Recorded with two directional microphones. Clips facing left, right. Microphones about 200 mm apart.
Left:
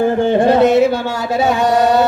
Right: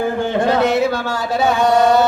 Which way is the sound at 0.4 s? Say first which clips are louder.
Left 4 dB; 20° left (ahead or behind).